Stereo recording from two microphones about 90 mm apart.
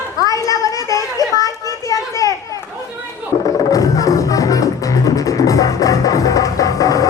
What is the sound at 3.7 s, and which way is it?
Music, 40° left (ahead or behind).